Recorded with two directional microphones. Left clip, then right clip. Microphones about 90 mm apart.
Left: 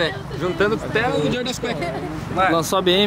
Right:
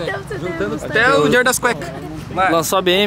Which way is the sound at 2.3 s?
5° right (ahead or behind).